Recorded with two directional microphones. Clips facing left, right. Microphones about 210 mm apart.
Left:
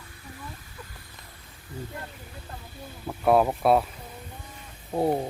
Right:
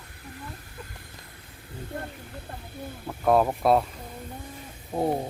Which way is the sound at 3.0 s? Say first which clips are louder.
Left 1 dB; 5° left (ahead or behind).